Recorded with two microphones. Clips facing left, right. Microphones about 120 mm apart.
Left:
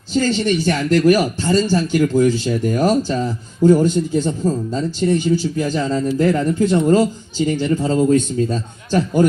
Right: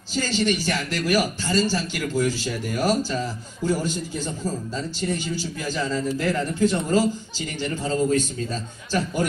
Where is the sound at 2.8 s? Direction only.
20° left (ahead or behind).